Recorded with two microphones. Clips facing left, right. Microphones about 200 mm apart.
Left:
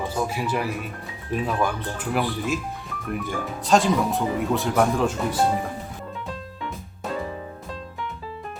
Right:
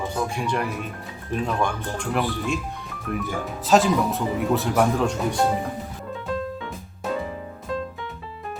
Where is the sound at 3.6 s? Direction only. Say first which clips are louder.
Right 1 dB; centre (ahead or behind).